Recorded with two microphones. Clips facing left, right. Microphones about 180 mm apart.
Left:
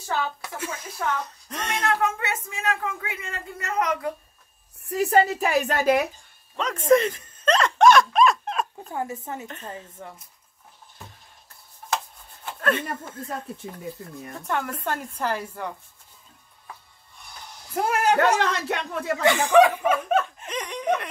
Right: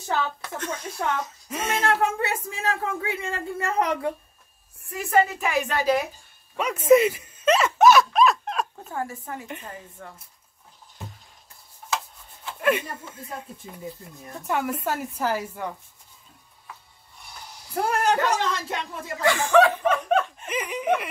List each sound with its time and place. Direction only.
0.4 s speech: 5° left (ahead or behind)
2.0 s speech: 30° right (ahead or behind)
4.9 s a woman's voice: 35° left (ahead or behind)
6.5 s a sound: 10° right (ahead or behind)
8.9 s speech: 20° left (ahead or behind)
12.5 s speech: 10° right (ahead or behind)
17.7 s speech: 5° left (ahead or behind)
18.1 s speech: 65° left (ahead or behind)
19.2 s speech: 15° left (ahead or behind); by 21.1 s 5° right (ahead or behind)